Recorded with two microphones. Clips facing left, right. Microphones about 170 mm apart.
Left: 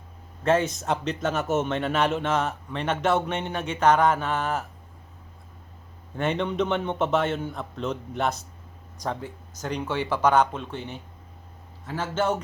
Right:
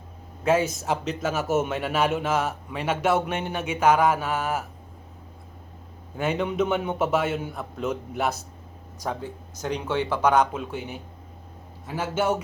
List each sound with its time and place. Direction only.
0.4 s speech: 5° right (ahead or behind)
6.1 s a man's voice: 5° right (ahead or behind)